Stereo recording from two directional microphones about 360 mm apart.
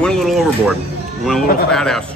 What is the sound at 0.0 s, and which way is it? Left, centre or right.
Music, centre.